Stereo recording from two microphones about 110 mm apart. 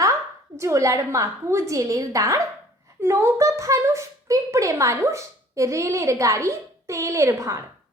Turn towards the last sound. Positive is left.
turn(degrees=-30)  # may be behind; listen again after turning